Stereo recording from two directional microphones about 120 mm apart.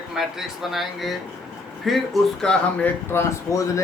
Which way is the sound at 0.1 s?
5° right (ahead or behind).